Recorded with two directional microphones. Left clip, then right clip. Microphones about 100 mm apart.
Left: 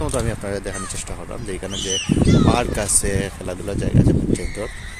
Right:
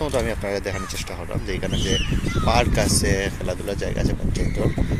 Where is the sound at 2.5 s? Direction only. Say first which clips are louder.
Even; 35° left (ahead or behind).